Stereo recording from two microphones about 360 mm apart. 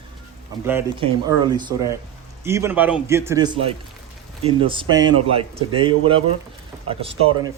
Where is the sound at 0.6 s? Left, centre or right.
Centre.